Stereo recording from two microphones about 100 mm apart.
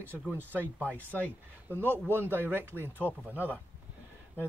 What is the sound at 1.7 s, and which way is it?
Speech, 20° right (ahead or behind).